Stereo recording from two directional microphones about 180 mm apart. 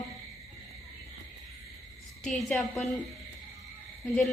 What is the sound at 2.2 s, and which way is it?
Speech, 5° left (ahead or behind).